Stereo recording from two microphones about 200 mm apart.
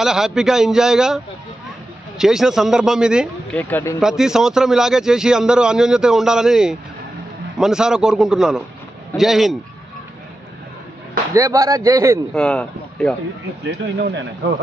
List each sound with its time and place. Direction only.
0.0 s a man's voice: centre (ahead or behind)
3.6 s speech: 10° left (ahead or behind)
4.0 s a man's voice: centre (ahead or behind)
11.3 s speech: 15° right (ahead or behind)
12.4 s speech: 5° left (ahead or behind)